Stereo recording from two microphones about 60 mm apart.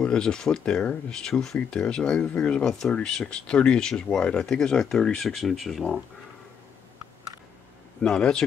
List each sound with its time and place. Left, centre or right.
0.0 s speech: centre
8.0 s speech: centre